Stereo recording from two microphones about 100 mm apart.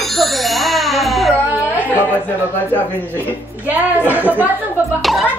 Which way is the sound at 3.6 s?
15° right (ahead or behind).